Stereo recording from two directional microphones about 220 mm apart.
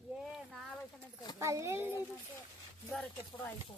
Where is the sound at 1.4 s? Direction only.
15° right (ahead or behind).